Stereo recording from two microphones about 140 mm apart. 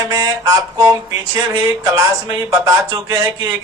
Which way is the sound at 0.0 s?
25° right (ahead or behind).